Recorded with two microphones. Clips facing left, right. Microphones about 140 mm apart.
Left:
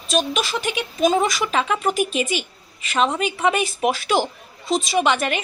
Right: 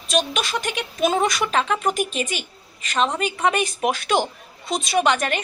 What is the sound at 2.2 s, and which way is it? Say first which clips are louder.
Speech: left 3 dB; 45° right (ahead or behind).